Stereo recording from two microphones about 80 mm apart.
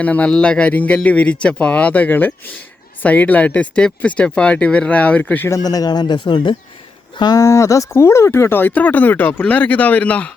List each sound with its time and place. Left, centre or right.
0.0 s speech: centre
5.5 s speech: left
7.3 s speech: left; by 10.3 s centre